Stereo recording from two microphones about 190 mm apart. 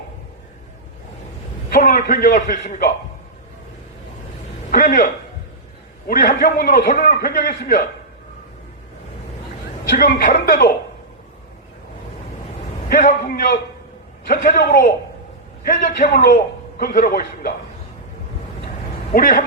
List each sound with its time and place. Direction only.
1.7 s a man's voice: 45° left (ahead or behind)
4.7 s a man's voice: 45° left (ahead or behind)
9.9 s a man's voice: 50° left (ahead or behind)
12.9 s a man's voice: 50° left (ahead or behind)
19.1 s a man's voice: 50° left (ahead or behind)